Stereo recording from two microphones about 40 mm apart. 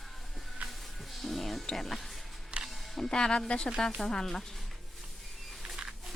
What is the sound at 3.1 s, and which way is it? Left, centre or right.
Speech, centre.